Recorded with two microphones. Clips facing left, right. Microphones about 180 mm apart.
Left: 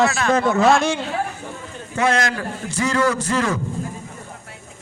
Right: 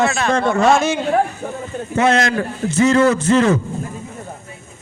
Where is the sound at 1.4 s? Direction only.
55° right (ahead or behind).